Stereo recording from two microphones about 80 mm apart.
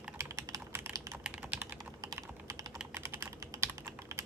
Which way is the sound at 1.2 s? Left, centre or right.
Centre.